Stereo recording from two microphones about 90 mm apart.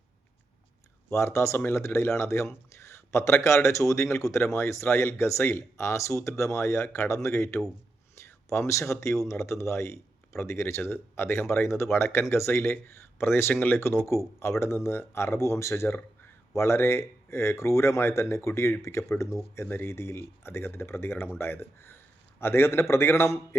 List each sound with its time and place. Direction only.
1.1 s speech: 30° left (ahead or behind)